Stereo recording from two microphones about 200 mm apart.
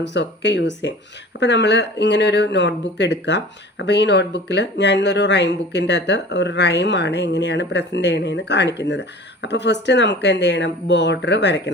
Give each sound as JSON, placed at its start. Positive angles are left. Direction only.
{"t": 0.0, "sound": "speech", "side_deg": 60}